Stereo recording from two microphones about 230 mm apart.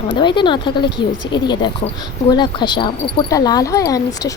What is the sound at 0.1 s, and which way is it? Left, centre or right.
Speech, left.